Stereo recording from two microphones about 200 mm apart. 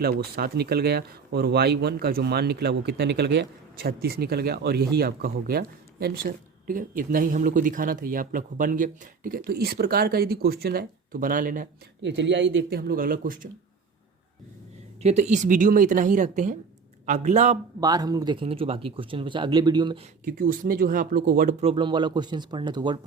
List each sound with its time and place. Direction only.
0.0 s speech: 50° right (ahead or behind)
12.0 s speech: 60° right (ahead or behind); by 13.5 s 45° right (ahead or behind)
15.0 s speech: 35° right (ahead or behind)
17.7 s speech: 20° right (ahead or behind)
20.2 s speech: 45° right (ahead or behind)
21.6 s speech: 25° right (ahead or behind)